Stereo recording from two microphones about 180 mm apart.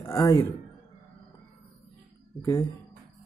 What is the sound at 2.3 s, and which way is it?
Speech, 15° left (ahead or behind).